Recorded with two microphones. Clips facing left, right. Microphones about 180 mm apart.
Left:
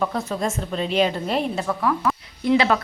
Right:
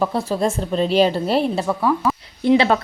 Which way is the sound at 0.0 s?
30° right (ahead or behind).